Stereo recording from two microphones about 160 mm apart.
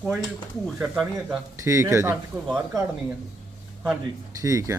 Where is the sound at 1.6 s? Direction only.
15° right (ahead or behind).